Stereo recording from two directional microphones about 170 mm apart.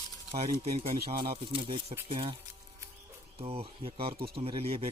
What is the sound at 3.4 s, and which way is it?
Speech, 35° right (ahead or behind).